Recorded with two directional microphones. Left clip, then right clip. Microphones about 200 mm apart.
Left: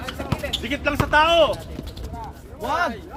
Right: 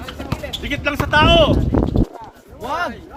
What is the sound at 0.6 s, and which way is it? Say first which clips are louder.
Speech: right 4 dB; 40° right (ahead or behind).